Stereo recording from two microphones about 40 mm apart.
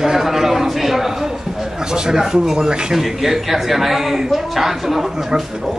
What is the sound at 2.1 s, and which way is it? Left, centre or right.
A man's voice, centre.